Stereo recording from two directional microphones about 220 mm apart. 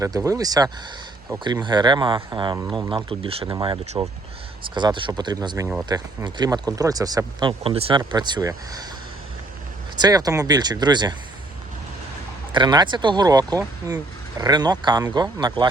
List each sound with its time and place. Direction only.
0.0 s speech: 15° right (ahead or behind)
9.9 s speech: 15° right (ahead or behind)
12.5 s speech: 20° right (ahead or behind)